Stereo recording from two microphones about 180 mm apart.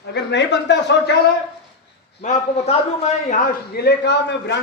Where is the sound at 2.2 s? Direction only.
40° left (ahead or behind).